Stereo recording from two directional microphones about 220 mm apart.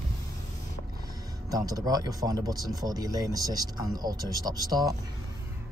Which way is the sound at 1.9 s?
15° right (ahead or behind).